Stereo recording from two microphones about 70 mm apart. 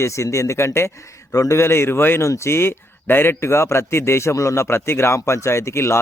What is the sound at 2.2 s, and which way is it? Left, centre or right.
Speech, left.